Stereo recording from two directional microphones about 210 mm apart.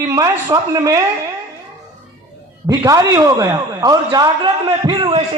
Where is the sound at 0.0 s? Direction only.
15° right (ahead or behind).